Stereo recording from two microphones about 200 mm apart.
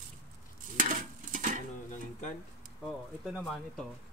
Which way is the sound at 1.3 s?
40° right (ahead or behind).